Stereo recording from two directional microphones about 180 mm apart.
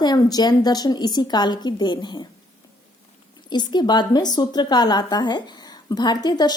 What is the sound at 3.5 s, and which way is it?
Speech, 25° left (ahead or behind).